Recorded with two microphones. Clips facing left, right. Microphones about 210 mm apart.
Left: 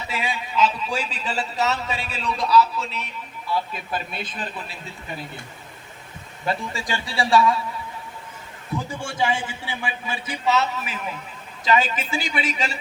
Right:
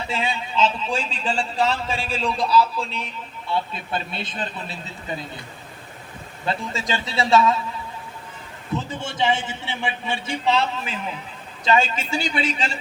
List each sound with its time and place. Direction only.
0.1 s a sound: 25° right (ahead or behind)
0.5 s a man's voice: 25° right (ahead or behind)
0.9 s speech: 5° left (ahead or behind)
1.2 s a man's voice: 30° right (ahead or behind)
2.6 s a man's voice: centre (ahead or behind)
3.5 s a man's voice: 25° right (ahead or behind)
6.4 s a man's voice: 25° right (ahead or behind)
8.7 s a man's voice: 25° right (ahead or behind)
11.6 s a man's voice: 25° right (ahead or behind)